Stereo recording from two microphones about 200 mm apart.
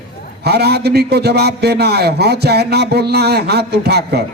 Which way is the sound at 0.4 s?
55° right (ahead or behind).